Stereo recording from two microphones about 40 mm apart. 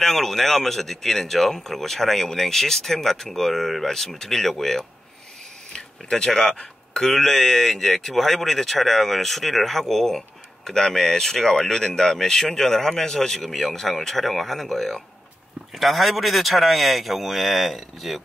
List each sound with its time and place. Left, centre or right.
0.0 s speech: centre
5.7 s speech: centre
15.7 s speech: centre